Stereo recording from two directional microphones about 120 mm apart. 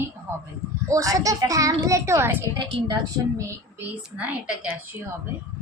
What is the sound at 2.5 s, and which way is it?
Speech, 40° right (ahead or behind).